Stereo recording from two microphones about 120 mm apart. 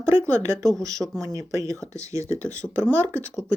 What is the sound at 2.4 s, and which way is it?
Speech, 10° left (ahead or behind).